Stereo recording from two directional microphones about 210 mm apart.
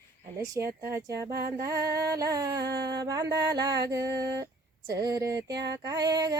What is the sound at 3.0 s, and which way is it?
Female singing, 15° right (ahead or behind).